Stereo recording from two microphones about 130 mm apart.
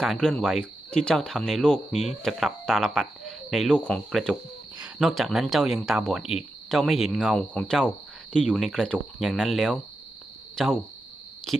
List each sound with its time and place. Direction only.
0.0 s speech: 5° left (ahead or behind)
1.9 s speech: 60° left (ahead or behind)
2.2 s speech: centre (ahead or behind)